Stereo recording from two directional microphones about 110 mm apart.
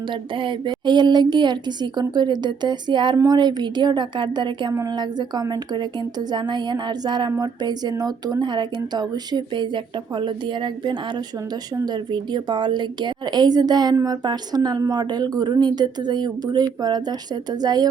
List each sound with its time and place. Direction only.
0.1 s speech: 45° right (ahead or behind)
4.7 s speech: 30° right (ahead or behind)
4.9 s a woman's voice: 40° right (ahead or behind)